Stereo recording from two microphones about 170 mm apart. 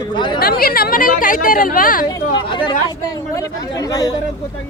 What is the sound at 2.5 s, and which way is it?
Speech, 30° left (ahead or behind).